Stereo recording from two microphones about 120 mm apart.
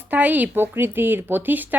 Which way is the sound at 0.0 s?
15° right (ahead or behind).